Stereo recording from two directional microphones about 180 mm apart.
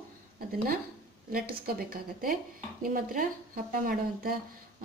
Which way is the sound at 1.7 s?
55° right (ahead or behind).